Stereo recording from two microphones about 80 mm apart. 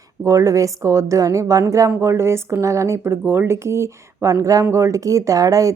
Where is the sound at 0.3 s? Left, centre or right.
Right.